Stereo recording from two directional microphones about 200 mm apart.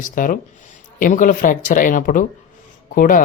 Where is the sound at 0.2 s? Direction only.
40° left (ahead or behind).